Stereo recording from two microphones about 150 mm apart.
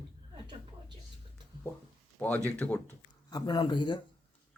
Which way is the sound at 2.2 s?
10° left (ahead or behind).